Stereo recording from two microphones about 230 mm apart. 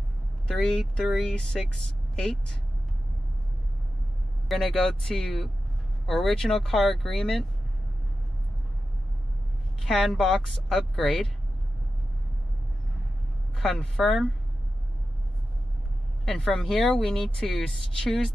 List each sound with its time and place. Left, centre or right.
0.5 s speech: centre
4.5 s speech: centre
9.8 s speech: centre
13.6 s speech: centre
16.3 s speech: centre